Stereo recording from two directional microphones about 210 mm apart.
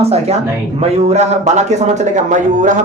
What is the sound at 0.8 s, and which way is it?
Speech, 30° right (ahead or behind).